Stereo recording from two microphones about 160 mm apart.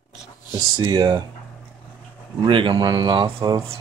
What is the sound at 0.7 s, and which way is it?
Speech, 25° right (ahead or behind).